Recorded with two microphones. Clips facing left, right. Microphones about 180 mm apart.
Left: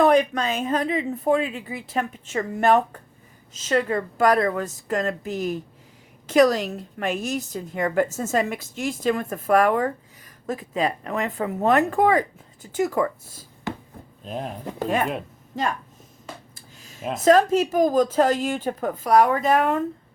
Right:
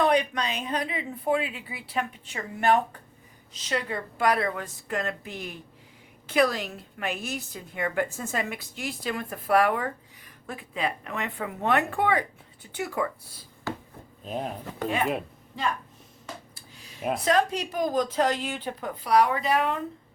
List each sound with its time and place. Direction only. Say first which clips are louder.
0.0 s a woman's voice: left 6 dB; 45° left (ahead or behind)
13.7 s chopping: left 2 dB; 20° left (ahead or behind)
14.3 s speech: left 1 dB; centre (ahead or behind)
14.6 s a woman's voice: left 6 dB; 45° left (ahead or behind)
16.6 s a sound: left 2 dB; 45° left (ahead or behind)
17.2 s a woman's voice: left 9 dB; 45° left (ahead or behind)